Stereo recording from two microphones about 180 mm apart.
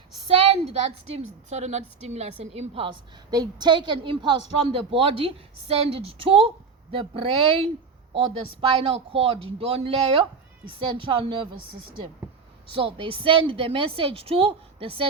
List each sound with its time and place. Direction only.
0.3 s a sound: 35° right (ahead or behind)
1.1 s a woman's voice: 40° right (ahead or behind)
12.7 s a woman's voice: 30° right (ahead or behind)